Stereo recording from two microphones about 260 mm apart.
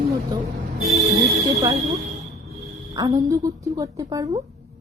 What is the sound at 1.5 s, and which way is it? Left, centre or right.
Speech, centre.